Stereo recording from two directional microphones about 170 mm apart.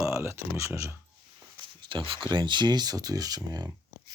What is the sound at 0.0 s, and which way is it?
Speech, 15° right (ahead or behind).